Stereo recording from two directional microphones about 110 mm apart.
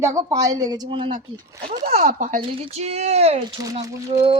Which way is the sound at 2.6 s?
75° right (ahead or behind).